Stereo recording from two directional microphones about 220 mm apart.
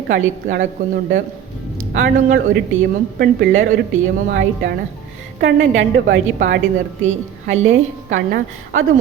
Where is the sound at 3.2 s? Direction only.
45° right (ahead or behind).